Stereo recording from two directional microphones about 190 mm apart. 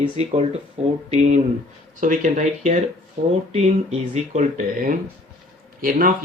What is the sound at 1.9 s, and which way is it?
Speech, 40° right (ahead or behind).